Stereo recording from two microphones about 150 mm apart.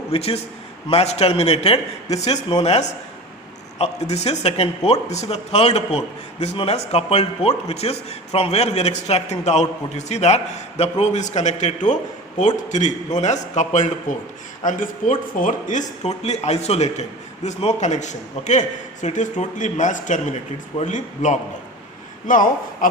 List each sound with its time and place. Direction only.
0.1 s a man's voice: 40° left (ahead or behind); by 22.9 s 60° left (ahead or behind)